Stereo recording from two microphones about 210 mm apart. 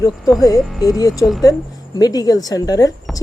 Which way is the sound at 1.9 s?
20° left (ahead or behind).